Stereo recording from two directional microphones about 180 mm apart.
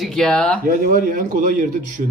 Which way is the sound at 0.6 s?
50° right (ahead or behind).